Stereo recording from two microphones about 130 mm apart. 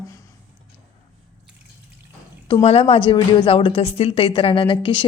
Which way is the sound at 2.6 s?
45° left (ahead or behind).